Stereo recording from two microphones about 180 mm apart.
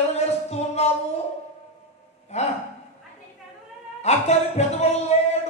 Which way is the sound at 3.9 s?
40° left (ahead or behind).